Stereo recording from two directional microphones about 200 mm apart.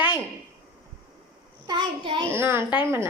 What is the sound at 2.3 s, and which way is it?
Speech, 10° right (ahead or behind).